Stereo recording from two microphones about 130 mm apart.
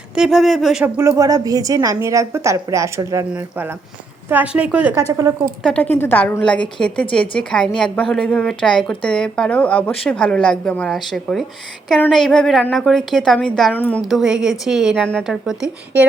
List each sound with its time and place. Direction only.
0.1 s a woman's voice: 5° right (ahead or behind)
0.9 s a woman's voice: 20° right (ahead or behind)
3.3 s a woman's voice: 10° right (ahead or behind)
4.9 s a woman's voice: 20° right (ahead or behind)
5.6 s a woman's voice: 10° left (ahead or behind)
14.0 s a woman's voice: centre (ahead or behind)